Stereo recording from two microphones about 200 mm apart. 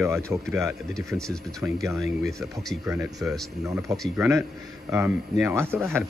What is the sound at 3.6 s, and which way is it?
Speech, 15° right (ahead or behind).